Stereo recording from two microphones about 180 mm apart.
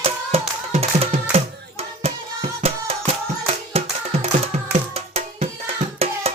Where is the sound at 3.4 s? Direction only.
35° right (ahead or behind).